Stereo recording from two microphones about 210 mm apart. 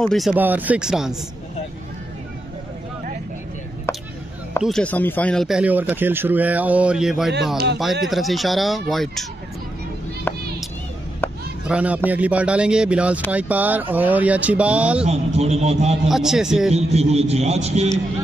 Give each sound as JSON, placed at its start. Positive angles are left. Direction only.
{"t": 0.0, "sound": "a man's voice", "side_deg": 0}
{"t": 3.9, "sound": "a sound", "side_deg": 10}
{"t": 4.6, "sound": "a man's voice", "side_deg": 0}
{"t": 7.5, "sound": "speech", "side_deg": -50}
{"t": 7.8, "sound": "a man's voice", "side_deg": 0}
{"t": 10.3, "sound": "a sound", "side_deg": 10}
{"t": 11.2, "sound": "chop", "side_deg": 10}
{"t": 11.6, "sound": "a man's voice", "side_deg": -5}
{"t": 15.0, "sound": "a man's voice", "side_deg": -30}
{"t": 16.1, "sound": "a man's voice", "side_deg": 0}
{"t": 16.7, "sound": "a man's voice", "side_deg": -30}